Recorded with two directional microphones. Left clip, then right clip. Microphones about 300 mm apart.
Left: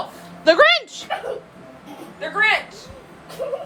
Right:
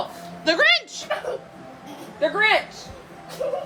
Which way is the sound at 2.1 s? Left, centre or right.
Right.